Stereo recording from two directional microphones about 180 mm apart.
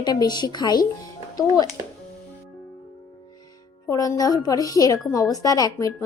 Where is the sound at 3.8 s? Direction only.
15° left (ahead or behind).